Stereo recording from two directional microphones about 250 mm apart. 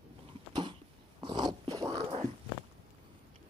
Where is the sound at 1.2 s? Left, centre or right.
Centre.